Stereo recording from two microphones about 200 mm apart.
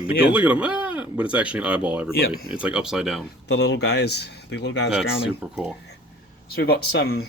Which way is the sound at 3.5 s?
60° left (ahead or behind).